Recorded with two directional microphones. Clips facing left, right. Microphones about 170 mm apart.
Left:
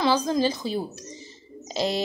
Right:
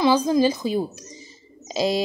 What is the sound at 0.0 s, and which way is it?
Speech, 10° right (ahead or behind).